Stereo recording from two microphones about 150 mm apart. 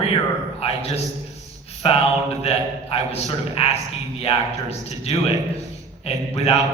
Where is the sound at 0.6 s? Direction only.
40° left (ahead or behind).